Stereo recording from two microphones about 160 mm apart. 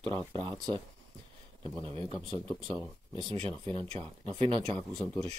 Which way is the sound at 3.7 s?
35° right (ahead or behind).